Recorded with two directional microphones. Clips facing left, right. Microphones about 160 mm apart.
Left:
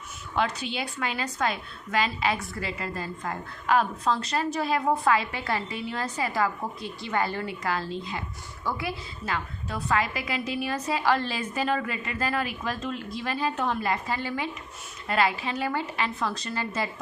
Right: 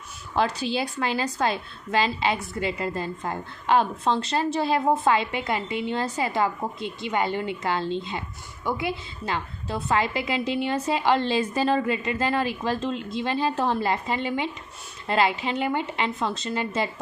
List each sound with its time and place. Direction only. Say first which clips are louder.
0.3 s a woman's voice: right 4 dB; 35° right (ahead or behind)